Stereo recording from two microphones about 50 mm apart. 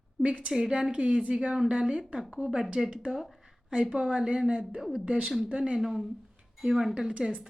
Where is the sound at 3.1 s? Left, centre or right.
Centre.